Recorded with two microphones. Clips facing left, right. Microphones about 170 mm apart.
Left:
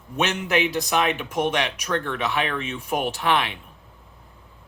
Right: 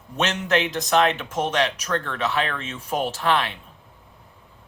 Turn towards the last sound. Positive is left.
turn(degrees=15)  # may be behind; listen again after turning